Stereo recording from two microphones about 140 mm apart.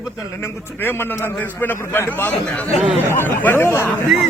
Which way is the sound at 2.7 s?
Centre (ahead or behind).